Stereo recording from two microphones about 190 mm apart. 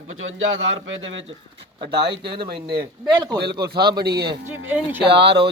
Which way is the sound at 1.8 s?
30° right (ahead or behind).